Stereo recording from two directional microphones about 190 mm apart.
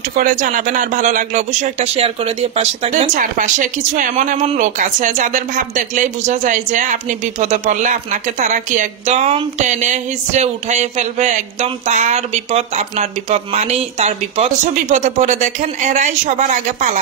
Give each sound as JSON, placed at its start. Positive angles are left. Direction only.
{"t": 0.1, "sound": "speech", "side_deg": -45}